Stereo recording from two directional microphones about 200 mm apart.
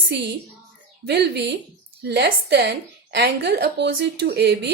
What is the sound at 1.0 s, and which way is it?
Speech, 55° right (ahead or behind).